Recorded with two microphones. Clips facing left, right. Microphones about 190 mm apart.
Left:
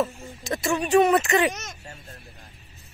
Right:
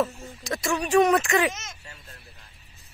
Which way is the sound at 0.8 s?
Centre (ahead or behind).